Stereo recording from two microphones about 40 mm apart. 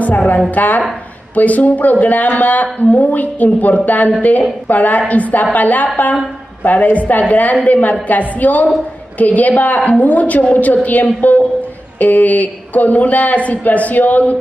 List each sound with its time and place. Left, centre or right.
0.6 s a woman's voice: left